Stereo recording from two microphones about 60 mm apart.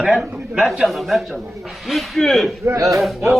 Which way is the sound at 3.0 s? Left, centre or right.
Centre.